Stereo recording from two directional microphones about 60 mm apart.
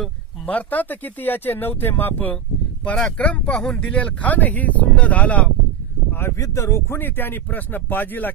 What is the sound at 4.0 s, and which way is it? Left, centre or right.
Speech, left.